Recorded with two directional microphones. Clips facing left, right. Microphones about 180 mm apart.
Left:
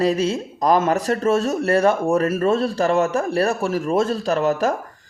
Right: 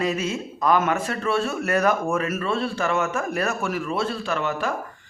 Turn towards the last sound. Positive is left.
turn(degrees=40)  # may be behind; listen again after turning